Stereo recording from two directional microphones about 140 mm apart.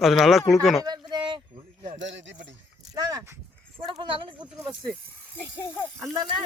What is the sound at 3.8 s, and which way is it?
Speech, 35° right (ahead or behind).